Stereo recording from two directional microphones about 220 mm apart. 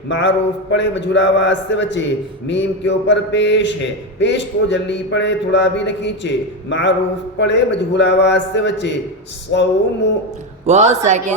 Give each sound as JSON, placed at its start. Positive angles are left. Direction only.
{"t": 0.1, "sound": "a man's voice", "side_deg": 55}
{"t": 10.7, "sound": "a man's voice", "side_deg": -30}